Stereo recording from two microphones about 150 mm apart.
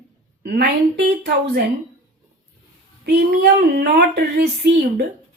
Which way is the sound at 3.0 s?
90° right.